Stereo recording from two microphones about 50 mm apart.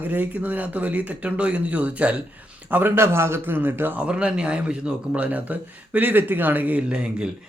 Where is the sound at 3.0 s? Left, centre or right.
Right.